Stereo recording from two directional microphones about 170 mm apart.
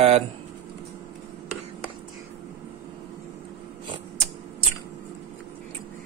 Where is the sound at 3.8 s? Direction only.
35° right (ahead or behind).